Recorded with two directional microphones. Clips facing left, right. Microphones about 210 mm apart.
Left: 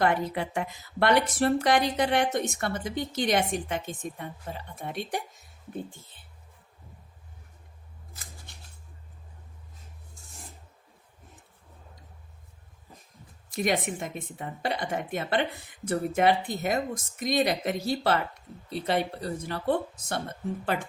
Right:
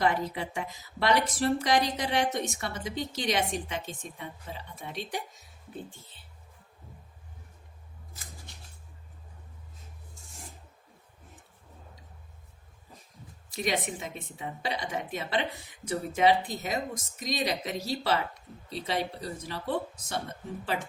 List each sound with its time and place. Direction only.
0.0 s speech: 60° left (ahead or behind)
13.5 s speech: 50° left (ahead or behind)